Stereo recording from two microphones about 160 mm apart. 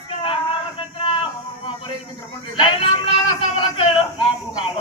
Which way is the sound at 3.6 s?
35° left (ahead or behind).